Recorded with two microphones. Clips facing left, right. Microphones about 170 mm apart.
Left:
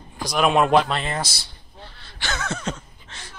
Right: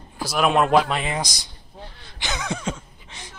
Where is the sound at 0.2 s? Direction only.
5° right (ahead or behind).